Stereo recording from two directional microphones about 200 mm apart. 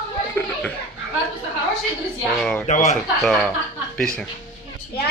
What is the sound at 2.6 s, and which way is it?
Speech, 35° left (ahead or behind).